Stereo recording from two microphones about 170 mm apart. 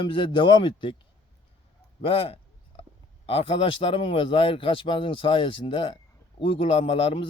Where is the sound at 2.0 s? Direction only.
35° left (ahead or behind).